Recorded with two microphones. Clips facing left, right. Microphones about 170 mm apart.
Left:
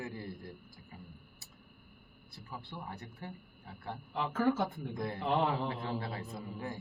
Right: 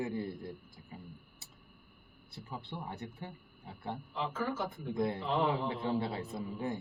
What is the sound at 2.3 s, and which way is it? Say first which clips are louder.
Speech: right 2 dB; 20° right (ahead or behind).